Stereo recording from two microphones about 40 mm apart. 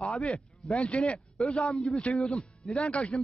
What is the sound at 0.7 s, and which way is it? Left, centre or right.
Speech, left.